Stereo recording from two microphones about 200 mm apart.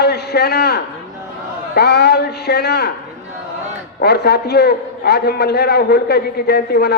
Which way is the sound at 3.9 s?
55° left (ahead or behind).